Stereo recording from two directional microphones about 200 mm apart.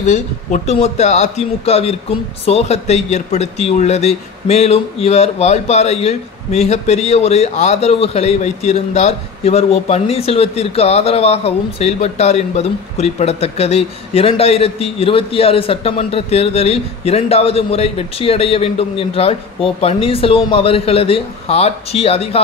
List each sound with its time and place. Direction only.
0.0 s a man's voice: 35° left (ahead or behind)